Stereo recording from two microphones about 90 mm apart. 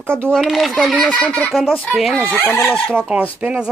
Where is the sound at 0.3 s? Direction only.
Centre (ahead or behind).